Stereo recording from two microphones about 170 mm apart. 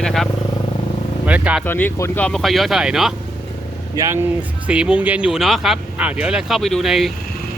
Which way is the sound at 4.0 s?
20° right (ahead or behind).